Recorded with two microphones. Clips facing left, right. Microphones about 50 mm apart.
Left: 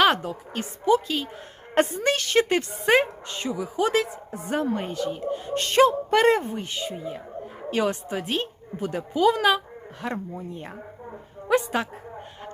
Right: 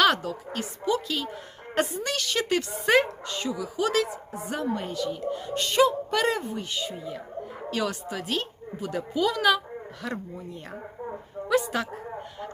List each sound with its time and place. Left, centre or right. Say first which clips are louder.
0.0 s a woman's voice: left 2 dB; left
1.7 s a woman's voice: left 5 dB; left
4.4 s a woman's voice: left 4 dB; left